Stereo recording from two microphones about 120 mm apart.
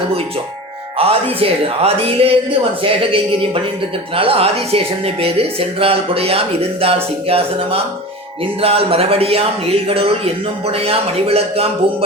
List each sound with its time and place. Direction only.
0.9 s speech: 55° right (ahead or behind)